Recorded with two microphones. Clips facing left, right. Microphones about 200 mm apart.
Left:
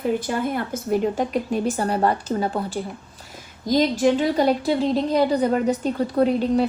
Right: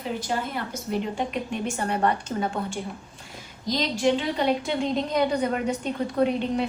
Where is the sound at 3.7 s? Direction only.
50° left (ahead or behind).